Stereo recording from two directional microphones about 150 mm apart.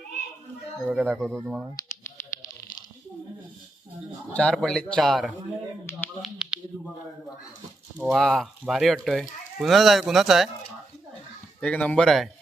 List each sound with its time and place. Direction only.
1.0 s speech: centre (ahead or behind)
4.3 s speech: 10° left (ahead or behind)
5.8 s speech: 20° left (ahead or behind)
6.2 s speech: 5° right (ahead or behind)
8.1 s speech: centre (ahead or behind)
11.6 s speech: 10° left (ahead or behind)